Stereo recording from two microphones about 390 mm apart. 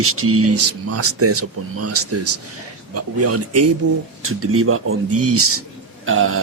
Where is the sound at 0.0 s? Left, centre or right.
Right.